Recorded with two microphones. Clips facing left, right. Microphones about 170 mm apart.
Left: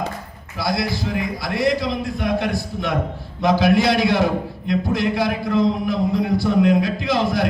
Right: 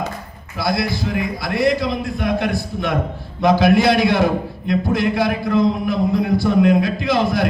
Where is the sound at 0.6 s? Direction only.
55° right (ahead or behind).